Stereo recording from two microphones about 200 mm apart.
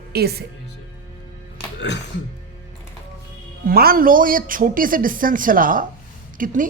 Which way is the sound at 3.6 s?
50° right (ahead or behind).